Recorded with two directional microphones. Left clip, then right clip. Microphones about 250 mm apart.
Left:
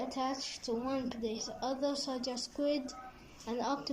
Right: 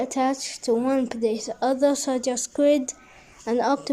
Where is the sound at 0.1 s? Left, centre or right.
Right.